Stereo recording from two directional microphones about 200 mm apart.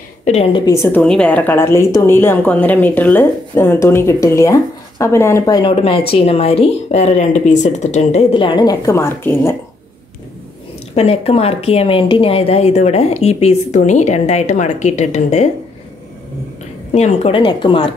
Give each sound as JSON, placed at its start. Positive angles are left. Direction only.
{"t": 0.2, "sound": "a woman's voice", "side_deg": 30}
{"t": 11.0, "sound": "speech", "side_deg": 30}
{"t": 16.9, "sound": "speech", "side_deg": 30}